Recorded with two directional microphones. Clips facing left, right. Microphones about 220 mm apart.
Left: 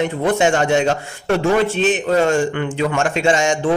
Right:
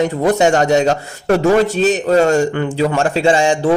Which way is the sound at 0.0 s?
40° right (ahead or behind).